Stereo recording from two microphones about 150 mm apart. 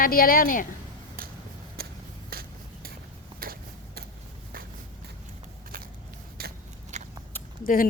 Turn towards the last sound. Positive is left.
turn(degrees=70)  # may be behind; listen again after turning